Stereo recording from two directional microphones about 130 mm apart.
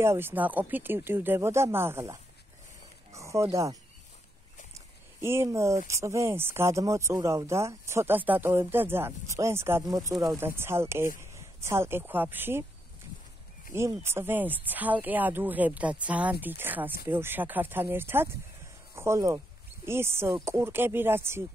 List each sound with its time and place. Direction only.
0.0 s speech: 20° right (ahead or behind)
4.7 s a sound: 20° right (ahead or behind)
5.9 s speech: 25° right (ahead or behind)
13.7 s speech: 20° right (ahead or behind)